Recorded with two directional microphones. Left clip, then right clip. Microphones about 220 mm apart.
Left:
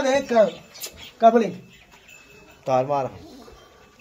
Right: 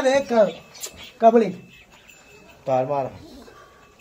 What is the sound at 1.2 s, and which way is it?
Speech, 5° right (ahead or behind).